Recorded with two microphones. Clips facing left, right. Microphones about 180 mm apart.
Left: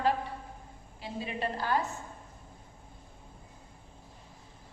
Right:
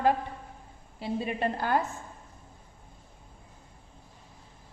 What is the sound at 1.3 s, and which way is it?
Speech, 55° right (ahead or behind).